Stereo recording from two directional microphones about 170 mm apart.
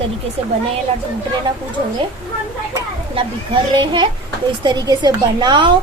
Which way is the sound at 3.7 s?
30° right (ahead or behind).